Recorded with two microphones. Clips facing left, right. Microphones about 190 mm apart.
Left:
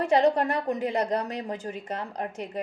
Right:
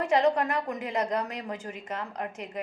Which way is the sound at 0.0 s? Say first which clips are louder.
Left 2 dB; 35° left (ahead or behind).